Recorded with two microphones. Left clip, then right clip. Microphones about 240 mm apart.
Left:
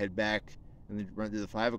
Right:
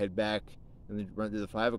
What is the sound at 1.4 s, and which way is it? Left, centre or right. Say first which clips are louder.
Speech: right 1 dB; centre.